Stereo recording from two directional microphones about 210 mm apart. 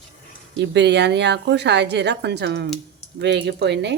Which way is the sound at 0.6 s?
55° right (ahead or behind).